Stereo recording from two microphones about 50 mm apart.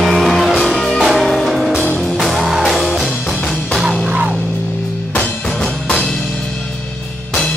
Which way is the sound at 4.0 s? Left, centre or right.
Centre.